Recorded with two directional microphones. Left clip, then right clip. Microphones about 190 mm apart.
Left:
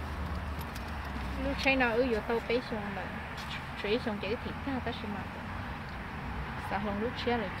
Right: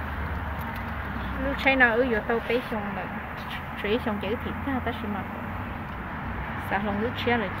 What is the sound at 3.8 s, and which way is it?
Speech, centre (ahead or behind).